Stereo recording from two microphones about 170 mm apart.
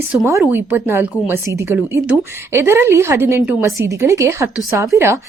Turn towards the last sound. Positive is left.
turn(degrees=-15)  # may be behind; listen again after turning